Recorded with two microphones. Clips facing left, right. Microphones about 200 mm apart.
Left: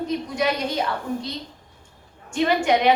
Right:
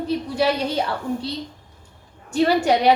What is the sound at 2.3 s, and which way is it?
Speech, 35° right (ahead or behind).